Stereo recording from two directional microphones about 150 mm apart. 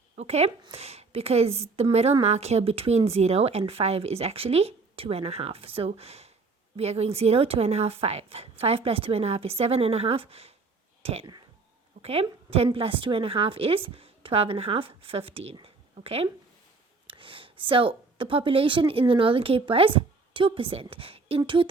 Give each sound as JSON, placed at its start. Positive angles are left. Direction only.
{"t": 0.2, "sound": "a woman's voice", "side_deg": -45}